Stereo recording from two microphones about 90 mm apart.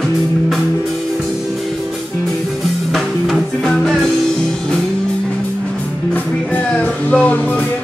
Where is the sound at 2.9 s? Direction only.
5° left (ahead or behind).